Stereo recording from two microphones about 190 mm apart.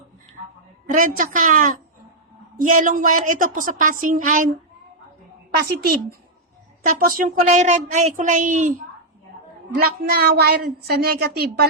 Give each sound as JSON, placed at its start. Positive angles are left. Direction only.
{"t": 0.9, "sound": "speech", "side_deg": -45}
{"t": 5.5, "sound": "a woman's voice", "side_deg": -55}
{"t": 9.7, "sound": "a woman's voice", "side_deg": -55}